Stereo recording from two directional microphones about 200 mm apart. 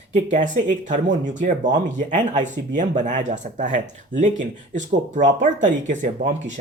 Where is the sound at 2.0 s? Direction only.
40° right (ahead or behind).